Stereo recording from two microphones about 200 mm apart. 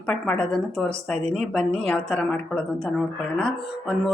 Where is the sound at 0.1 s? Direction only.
5° left (ahead or behind).